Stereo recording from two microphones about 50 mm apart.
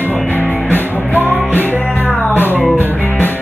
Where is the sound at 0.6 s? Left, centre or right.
Left.